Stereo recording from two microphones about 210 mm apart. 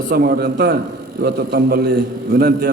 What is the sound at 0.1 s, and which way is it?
A man's voice, 45° right (ahead or behind).